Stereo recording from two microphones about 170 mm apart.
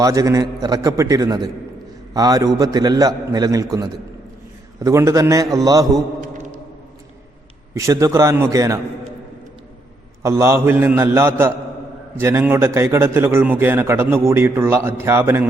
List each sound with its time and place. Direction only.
0.0 s a man's voice: 20° right (ahead or behind)
7.7 s a man's voice: 20° right (ahead or behind)
10.2 s a man's voice: 15° right (ahead or behind)